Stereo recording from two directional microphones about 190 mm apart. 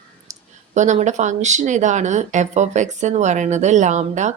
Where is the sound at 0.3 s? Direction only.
40° right (ahead or behind).